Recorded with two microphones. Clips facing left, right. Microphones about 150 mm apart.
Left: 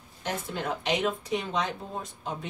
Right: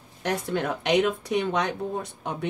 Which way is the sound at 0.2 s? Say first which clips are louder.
Right 6 dB; 70° right (ahead or behind).